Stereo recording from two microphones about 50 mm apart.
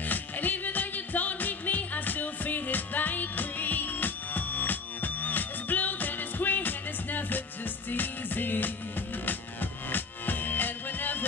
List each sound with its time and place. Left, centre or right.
0.0 s music: left